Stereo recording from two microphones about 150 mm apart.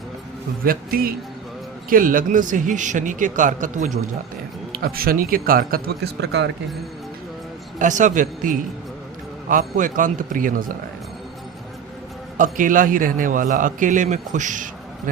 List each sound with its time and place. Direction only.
0.6 s a man's voice: 75° right (ahead or behind); by 3.9 s 55° right (ahead or behind)
4.7 s a man's voice: 85° right
7.8 s a man's voice: 55° right (ahead or behind)
12.4 s a man's voice: 60° right (ahead or behind)